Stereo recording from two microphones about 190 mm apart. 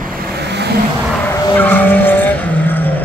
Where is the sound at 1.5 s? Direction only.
10° left (ahead or behind).